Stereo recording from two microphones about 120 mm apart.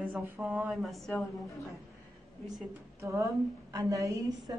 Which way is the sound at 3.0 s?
25° right (ahead or behind).